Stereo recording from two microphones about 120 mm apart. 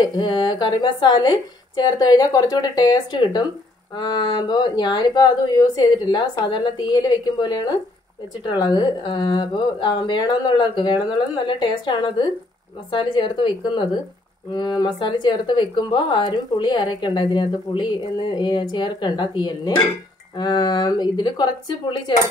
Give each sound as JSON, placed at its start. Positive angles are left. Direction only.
{"t": 0.0, "sound": "speech", "side_deg": 40}